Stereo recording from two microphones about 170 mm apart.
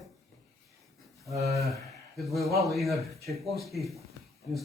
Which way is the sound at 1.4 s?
40° right (ahead or behind).